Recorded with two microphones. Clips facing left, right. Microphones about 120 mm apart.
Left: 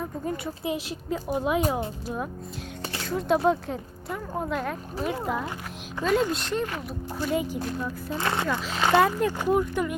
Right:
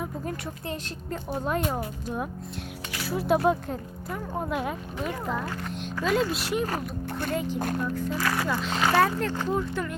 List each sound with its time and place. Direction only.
0.3 s speech: 5° left (ahead or behind)
3.0 s speech: 5° right (ahead or behind)
5.2 s speech: 5° left (ahead or behind)
7.3 s speech: 10° left (ahead or behind)
8.1 s speech: 25° left (ahead or behind)
8.4 s speech: centre (ahead or behind)